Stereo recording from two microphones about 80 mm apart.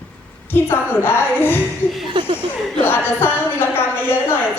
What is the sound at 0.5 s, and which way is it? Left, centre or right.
A woman's voice, left.